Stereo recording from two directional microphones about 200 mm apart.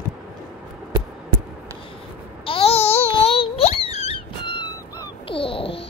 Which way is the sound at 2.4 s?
30° left (ahead or behind).